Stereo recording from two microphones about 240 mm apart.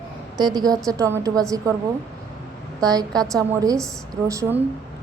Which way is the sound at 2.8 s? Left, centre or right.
Centre.